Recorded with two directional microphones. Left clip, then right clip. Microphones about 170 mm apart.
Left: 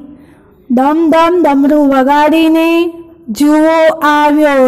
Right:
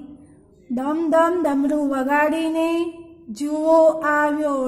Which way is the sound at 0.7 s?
30° left (ahead or behind).